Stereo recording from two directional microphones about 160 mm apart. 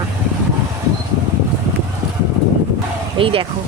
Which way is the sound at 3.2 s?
35° right (ahead or behind).